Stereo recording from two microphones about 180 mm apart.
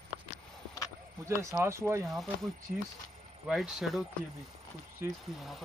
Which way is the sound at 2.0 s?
Centre (ahead or behind).